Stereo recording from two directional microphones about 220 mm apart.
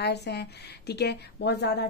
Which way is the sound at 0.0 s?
50° left (ahead or behind).